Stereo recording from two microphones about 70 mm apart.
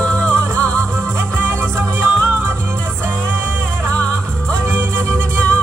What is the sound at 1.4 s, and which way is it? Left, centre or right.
Music, right.